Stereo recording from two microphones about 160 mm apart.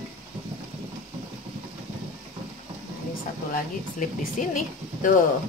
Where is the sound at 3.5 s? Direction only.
55° left (ahead or behind).